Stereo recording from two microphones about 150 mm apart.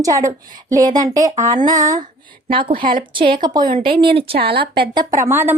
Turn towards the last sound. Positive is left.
turn(degrees=-15)  # may be behind; listen again after turning